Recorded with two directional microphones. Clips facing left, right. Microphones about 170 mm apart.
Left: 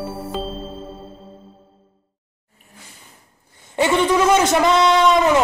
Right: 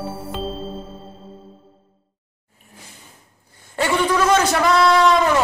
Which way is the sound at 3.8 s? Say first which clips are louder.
Left 2 dB; 20° left (ahead or behind).